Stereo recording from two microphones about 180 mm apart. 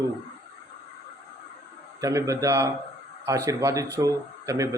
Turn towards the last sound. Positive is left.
turn(degrees=-15)  # may be behind; listen again after turning